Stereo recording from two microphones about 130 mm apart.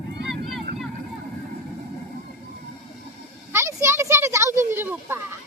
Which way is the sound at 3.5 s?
20° right (ahead or behind).